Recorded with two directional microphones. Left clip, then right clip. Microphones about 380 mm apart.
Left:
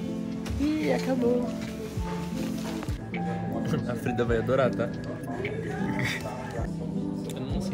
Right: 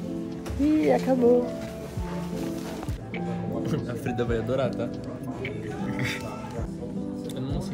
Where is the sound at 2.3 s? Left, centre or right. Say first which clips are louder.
Right 2 dB; right.